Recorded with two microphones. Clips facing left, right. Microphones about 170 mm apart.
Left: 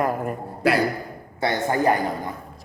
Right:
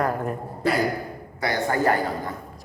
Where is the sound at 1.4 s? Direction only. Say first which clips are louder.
Left 1 dB; 20° left (ahead or behind).